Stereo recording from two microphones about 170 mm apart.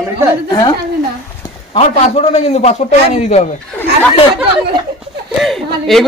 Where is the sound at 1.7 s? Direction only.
40° left (ahead or behind).